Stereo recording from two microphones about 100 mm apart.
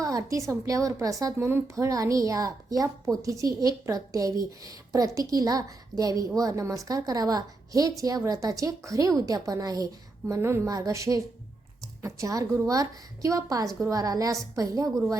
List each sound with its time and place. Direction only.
0.0 s a woman's voice: 35° right (ahead or behind)